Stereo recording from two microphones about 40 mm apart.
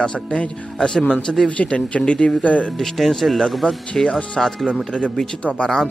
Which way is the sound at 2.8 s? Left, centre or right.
Centre.